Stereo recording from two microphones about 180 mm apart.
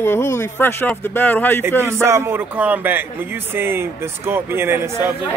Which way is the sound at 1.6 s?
15° right (ahead or behind).